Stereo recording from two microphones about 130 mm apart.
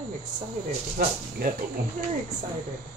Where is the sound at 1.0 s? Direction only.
90° right.